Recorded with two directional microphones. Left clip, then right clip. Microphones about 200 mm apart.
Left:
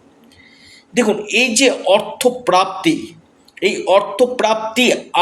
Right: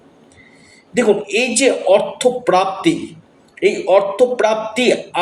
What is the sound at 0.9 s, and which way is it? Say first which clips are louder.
A man's voice: even; 40° left (ahead or behind).